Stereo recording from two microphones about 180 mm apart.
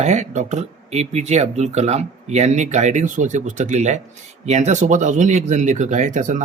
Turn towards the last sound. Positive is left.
turn(degrees=-45)  # may be behind; listen again after turning